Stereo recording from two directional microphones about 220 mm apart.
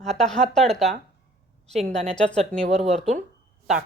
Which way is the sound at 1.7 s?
30° right (ahead or behind).